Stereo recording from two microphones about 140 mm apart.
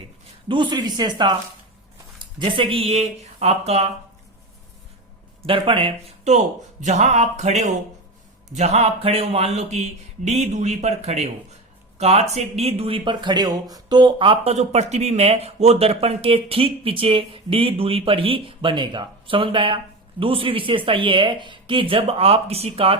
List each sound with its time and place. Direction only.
0.4 s speech: 35° right (ahead or behind)
2.4 s speech: 40° right (ahead or behind)
5.4 s speech: 40° right (ahead or behind)